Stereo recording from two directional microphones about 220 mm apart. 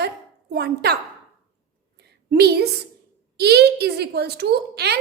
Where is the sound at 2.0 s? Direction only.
45° right (ahead or behind).